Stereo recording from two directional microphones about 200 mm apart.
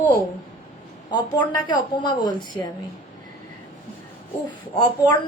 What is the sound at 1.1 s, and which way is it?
A woman's voice, 20° left (ahead or behind).